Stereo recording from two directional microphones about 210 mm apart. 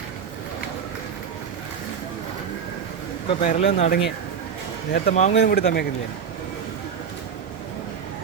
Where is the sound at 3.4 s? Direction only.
40° left (ahead or behind).